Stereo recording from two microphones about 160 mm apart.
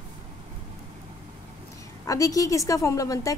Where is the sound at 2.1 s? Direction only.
20° left (ahead or behind).